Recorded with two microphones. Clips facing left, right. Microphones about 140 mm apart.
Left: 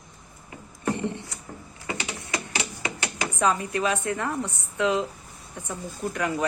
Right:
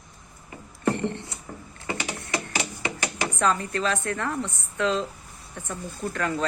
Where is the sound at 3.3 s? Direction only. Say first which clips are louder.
Left 1 dB; 15° left (ahead or behind).